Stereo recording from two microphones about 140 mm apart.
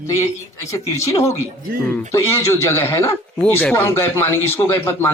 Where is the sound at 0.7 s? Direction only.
20° left (ahead or behind).